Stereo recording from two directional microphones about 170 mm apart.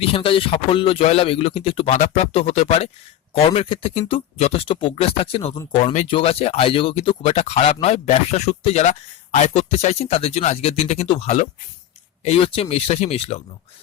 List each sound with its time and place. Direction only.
0.0 s speech: 35° left (ahead or behind)